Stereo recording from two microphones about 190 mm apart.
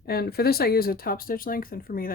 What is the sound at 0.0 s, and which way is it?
Speech, 55° left (ahead or behind).